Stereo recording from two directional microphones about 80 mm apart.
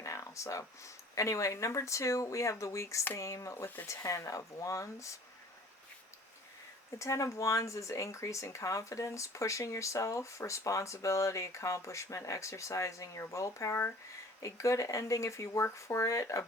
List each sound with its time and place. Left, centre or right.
0.0 s speech: left
7.0 s speech: left